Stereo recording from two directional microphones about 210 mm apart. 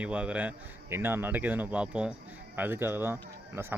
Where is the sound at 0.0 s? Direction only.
5° right (ahead or behind).